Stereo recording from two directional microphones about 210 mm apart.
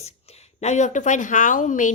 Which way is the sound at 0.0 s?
30° left (ahead or behind).